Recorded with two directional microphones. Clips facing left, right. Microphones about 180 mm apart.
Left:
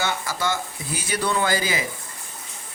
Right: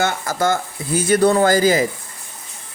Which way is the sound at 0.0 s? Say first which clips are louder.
Right 6 dB; 45° right (ahead or behind).